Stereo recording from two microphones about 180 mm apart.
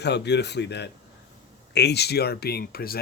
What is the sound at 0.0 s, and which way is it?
Speech, 70° left (ahead or behind).